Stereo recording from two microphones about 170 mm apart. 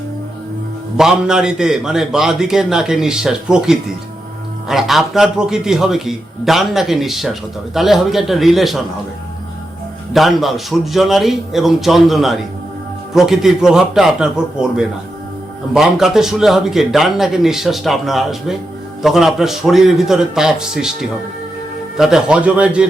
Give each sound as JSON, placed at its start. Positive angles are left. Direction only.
{"t": 0.9, "sound": "a man's voice", "side_deg": -5}
{"t": 10.1, "sound": "a man's voice", "side_deg": 0}